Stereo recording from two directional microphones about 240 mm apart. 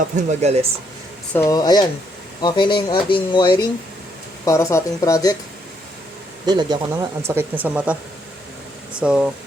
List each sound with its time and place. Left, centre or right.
0.2 s speech: right
1.3 s speech: centre
6.4 s speech: centre
9.0 s speech: centre